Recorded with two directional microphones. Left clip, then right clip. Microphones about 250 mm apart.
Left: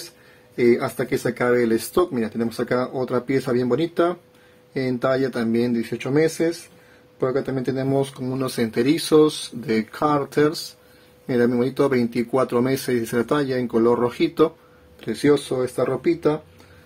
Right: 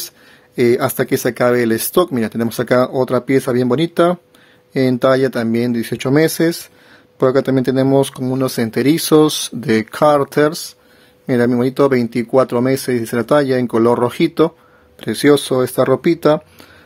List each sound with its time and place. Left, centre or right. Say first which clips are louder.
0.6 s speech: right 5 dB; right